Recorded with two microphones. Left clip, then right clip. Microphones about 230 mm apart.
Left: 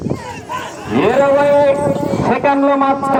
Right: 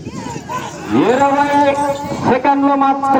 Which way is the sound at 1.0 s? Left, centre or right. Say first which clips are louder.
Left 1 dB; left.